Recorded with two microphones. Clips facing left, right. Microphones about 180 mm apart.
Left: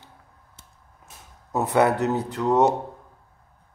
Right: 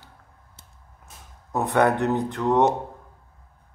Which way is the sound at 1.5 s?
5° left (ahead or behind).